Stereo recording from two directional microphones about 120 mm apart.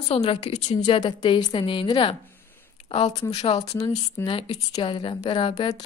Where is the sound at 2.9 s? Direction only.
60° left (ahead or behind).